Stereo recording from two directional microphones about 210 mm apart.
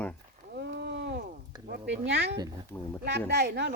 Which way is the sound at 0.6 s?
55° right (ahead or behind).